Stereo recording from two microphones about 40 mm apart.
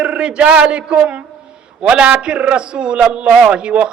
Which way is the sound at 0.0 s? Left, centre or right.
Right.